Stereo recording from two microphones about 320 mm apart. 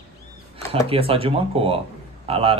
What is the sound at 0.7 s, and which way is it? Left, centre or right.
A man's voice, centre.